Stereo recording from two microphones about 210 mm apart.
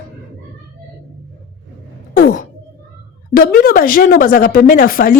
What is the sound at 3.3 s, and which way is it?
A woman's voice, 45° left (ahead or behind).